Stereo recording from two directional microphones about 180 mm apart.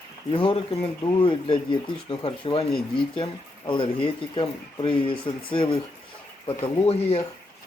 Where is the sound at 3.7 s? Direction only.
30° left (ahead or behind).